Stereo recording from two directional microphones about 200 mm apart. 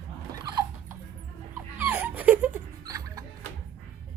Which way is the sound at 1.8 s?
10° right (ahead or behind).